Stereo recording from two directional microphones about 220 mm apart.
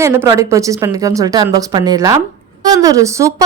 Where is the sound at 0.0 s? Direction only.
15° right (ahead or behind).